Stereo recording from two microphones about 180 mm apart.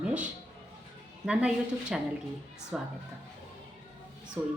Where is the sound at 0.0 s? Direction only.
5° right (ahead or behind).